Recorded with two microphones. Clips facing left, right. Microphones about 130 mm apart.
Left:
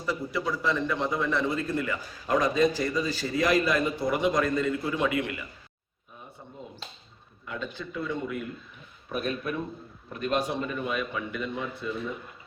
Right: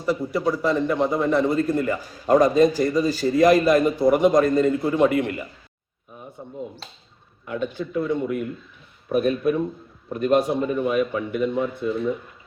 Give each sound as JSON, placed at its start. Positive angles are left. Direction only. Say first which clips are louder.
{"t": 0.0, "sound": "a man's voice", "louder": "right 7 dB", "side_deg": -40}
{"t": 7.4, "sound": "speech", "louder": "right 8 dB", "side_deg": -20}
{"t": 8.1, "sound": "a man's voice", "louder": "right 8 dB", "side_deg": -45}